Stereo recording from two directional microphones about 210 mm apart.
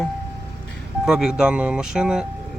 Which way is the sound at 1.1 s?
5° right (ahead or behind).